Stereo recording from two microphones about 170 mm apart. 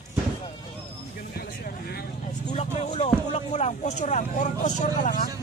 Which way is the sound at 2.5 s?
40° left (ahead or behind).